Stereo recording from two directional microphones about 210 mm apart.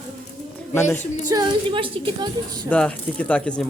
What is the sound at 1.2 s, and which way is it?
A woman's voice, 20° right (ahead or behind).